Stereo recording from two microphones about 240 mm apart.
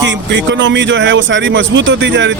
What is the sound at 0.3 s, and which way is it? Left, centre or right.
Speech, right.